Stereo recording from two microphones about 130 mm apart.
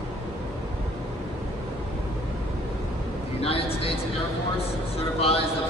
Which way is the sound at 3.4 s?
45° left (ahead or behind).